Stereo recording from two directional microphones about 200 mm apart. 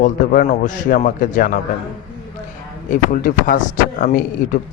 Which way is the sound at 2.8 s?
40° left (ahead or behind).